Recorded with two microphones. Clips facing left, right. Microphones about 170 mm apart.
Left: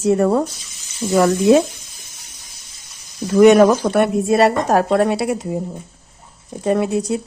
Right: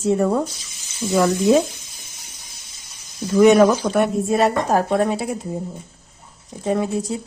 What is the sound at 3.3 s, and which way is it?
A woman's voice, 70° left (ahead or behind).